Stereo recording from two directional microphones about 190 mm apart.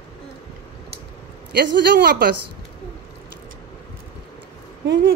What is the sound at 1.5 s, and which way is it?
Speech, 55° right (ahead or behind).